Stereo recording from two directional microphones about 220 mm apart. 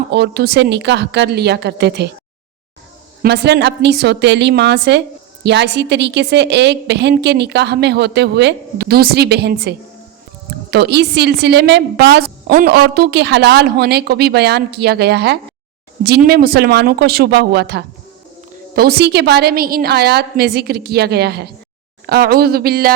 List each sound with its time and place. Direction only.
0.1 s a woman's voice: 50° right (ahead or behind)
3.2 s a woman's voice: 50° right (ahead or behind)